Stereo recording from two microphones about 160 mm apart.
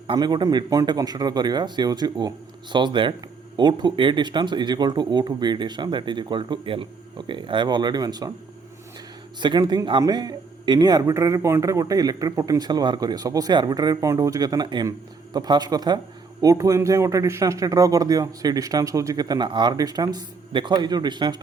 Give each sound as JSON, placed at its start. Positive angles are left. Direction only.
{"t": 0.1, "sound": "a man's voice", "side_deg": -25}
{"t": 9.4, "sound": "a man's voice", "side_deg": -25}